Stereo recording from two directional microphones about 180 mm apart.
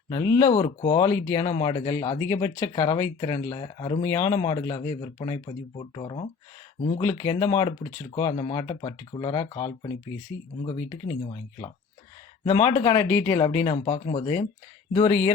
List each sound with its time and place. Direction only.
0.1 s speech: 20° left (ahead or behind)
0.5 s speech: 30° left (ahead or behind)
13.7 s speech: 40° left (ahead or behind)